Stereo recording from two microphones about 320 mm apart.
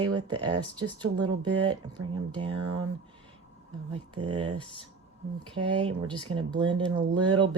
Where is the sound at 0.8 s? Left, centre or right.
Centre.